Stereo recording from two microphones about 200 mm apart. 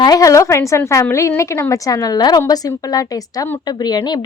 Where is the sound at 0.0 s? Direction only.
20° left (ahead or behind).